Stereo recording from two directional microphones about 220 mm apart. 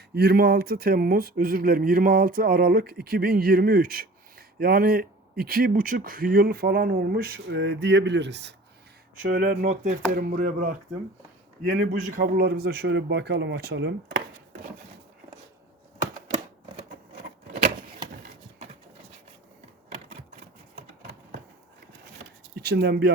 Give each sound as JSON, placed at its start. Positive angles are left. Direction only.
{"t": 0.1, "sound": "speech", "side_deg": -45}
{"t": 9.3, "sound": "speech", "side_deg": -40}
{"t": 11.7, "sound": "speech", "side_deg": -50}
{"t": 22.5, "sound": "speech", "side_deg": -45}